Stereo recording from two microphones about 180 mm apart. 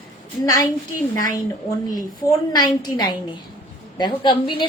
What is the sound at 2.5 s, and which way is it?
A woman's voice, 20° left (ahead or behind).